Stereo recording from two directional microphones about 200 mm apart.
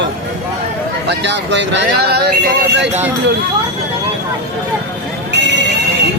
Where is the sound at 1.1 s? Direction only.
60° right (ahead or behind).